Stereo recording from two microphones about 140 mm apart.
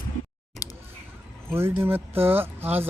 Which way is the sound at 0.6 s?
25° left (ahead or behind).